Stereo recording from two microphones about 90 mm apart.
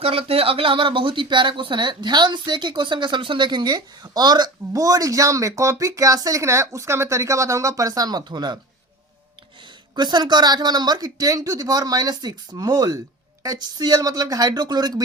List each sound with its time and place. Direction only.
0.0 s speech: 90° right; by 8.5 s 55° right (ahead or behind)
9.9 s speech: 55° right (ahead or behind)